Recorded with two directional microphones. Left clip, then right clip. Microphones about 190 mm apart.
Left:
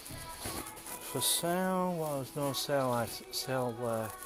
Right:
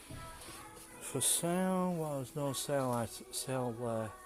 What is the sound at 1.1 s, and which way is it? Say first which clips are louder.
Speech: left 3 dB; 50° right (ahead or behind).